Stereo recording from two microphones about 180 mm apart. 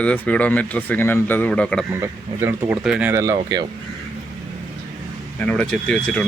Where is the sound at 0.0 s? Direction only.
5° left (ahead or behind).